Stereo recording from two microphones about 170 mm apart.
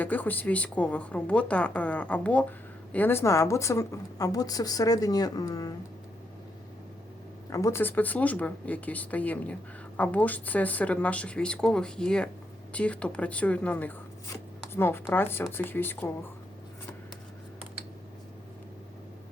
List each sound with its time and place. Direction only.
0.0 s a woman's voice: 10° left (ahead or behind)
7.5 s a woman's voice: 15° left (ahead or behind)